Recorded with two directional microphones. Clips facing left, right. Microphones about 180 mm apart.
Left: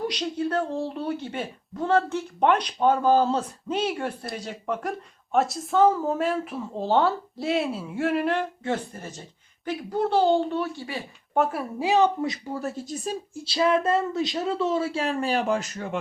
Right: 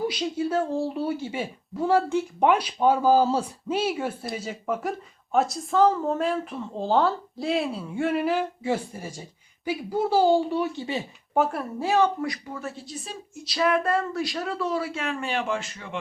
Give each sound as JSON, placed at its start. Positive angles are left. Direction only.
{"t": 0.0, "sound": "speech", "side_deg": -5}
{"t": 11.3, "sound": "speech", "side_deg": 0}
{"t": 11.8, "sound": "speech", "side_deg": 20}
{"t": 12.5, "sound": "speech", "side_deg": 40}
{"t": 13.4, "sound": "speech", "side_deg": 25}